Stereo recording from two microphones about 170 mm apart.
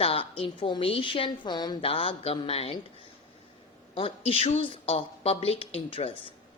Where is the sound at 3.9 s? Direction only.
35° left (ahead or behind).